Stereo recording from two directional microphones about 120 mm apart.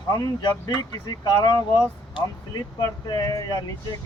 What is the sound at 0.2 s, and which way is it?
Speech, 35° left (ahead or behind).